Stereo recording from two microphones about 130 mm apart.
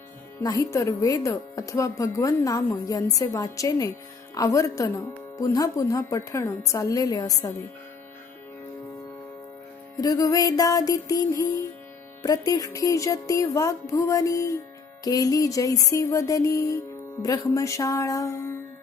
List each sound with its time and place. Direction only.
0.4 s speech: 25° left (ahead or behind)
10.0 s speech: 30° left (ahead or behind)